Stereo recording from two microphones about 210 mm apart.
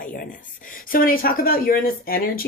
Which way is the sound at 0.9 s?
45° left (ahead or behind).